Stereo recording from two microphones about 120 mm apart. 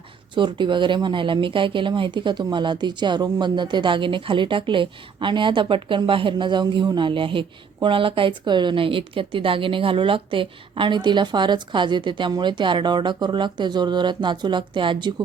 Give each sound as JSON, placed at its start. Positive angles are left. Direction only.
{"t": 0.3, "sound": "speech", "side_deg": -40}